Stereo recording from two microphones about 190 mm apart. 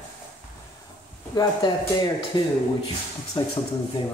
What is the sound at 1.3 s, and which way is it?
Speech, 20° left (ahead or behind).